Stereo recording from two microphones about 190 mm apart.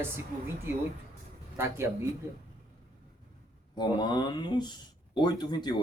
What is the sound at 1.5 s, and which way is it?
Speech, 15° right (ahead or behind).